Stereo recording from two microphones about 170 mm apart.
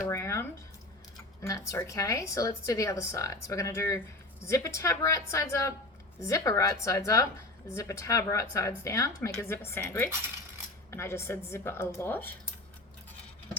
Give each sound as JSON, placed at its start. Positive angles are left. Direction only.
{"t": 0.1, "sound": "a woman's voice", "side_deg": 15}